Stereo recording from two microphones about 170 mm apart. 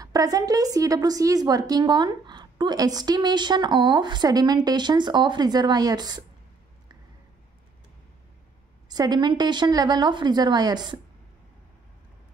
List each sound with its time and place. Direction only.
0.0 s a woman's voice: 20° right (ahead or behind)
8.8 s a woman's voice: 25° right (ahead or behind)